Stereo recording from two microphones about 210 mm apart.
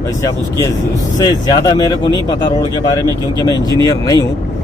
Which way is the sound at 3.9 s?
15° left (ahead or behind).